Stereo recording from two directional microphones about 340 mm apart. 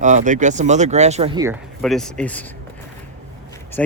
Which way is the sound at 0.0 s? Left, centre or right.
Right.